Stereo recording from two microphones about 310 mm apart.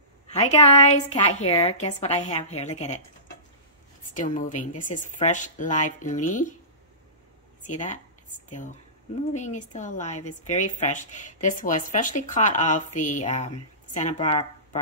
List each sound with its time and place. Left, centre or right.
0.3 s a woman's voice: centre
4.1 s a woman's voice: left
7.6 s a woman's voice: left